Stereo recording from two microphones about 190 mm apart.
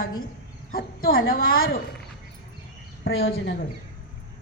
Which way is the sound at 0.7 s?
50° left (ahead or behind).